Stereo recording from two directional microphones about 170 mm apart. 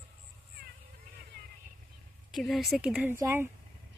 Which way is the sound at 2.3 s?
Centre (ahead or behind).